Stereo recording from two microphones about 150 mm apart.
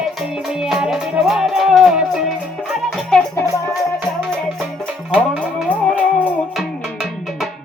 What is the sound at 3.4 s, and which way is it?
Music, 20° left (ahead or behind).